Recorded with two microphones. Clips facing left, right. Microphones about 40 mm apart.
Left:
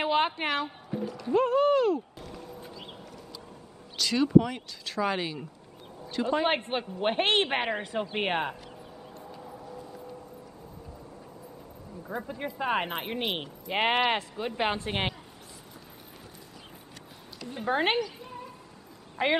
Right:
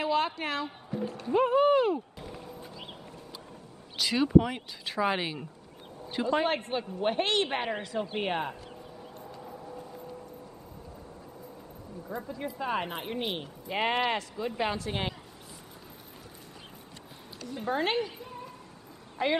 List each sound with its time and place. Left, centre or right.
0.0 s a woman's voice: left
0.7 s speech: centre
1.3 s speech: centre
2.1 s a sound: centre
4.0 s speech: centre
6.7 s speech: left
9.2 s a sound: centre
12.1 s speech: left
17.6 s speech: left
18.2 s a sound: centre
19.2 s speech: left